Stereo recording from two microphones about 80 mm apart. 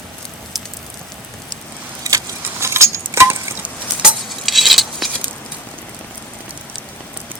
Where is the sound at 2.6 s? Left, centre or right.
Right.